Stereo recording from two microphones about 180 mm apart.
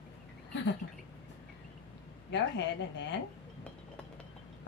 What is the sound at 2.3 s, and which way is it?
Speech, 75° left (ahead or behind).